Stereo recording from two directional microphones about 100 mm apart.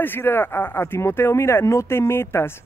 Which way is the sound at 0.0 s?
20° left (ahead or behind).